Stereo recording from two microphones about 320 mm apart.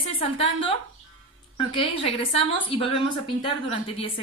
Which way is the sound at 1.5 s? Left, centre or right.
Centre.